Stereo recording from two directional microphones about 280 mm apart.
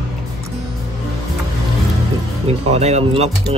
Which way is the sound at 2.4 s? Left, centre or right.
Right.